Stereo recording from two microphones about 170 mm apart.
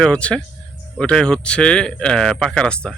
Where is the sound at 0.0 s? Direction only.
5° left (ahead or behind).